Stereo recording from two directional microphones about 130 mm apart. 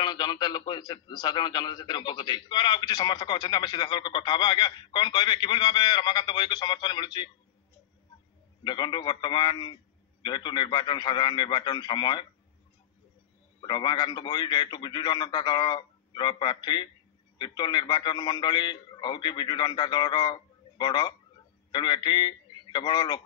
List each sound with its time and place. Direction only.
0.0 s a man's voice: 35° left (ahead or behind)
8.6 s a man's voice: 35° left (ahead or behind)
13.6 s a man's voice: 35° left (ahead or behind)